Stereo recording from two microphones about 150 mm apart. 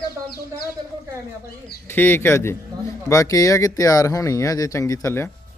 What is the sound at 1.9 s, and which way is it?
A man's voice, 15° left (ahead or behind).